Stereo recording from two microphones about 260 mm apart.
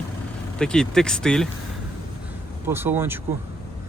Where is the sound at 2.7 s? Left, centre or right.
Centre.